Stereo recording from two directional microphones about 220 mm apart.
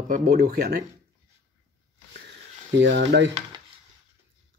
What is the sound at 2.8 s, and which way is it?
Speech, 55° right (ahead or behind).